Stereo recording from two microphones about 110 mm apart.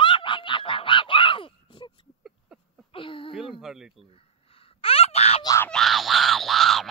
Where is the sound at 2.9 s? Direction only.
55° left (ahead or behind).